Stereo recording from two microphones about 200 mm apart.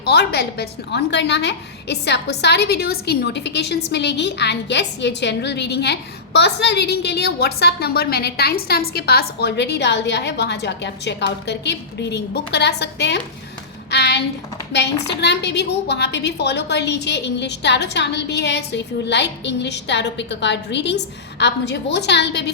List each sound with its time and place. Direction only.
0.0 s a woman's voice: 55° left (ahead or behind)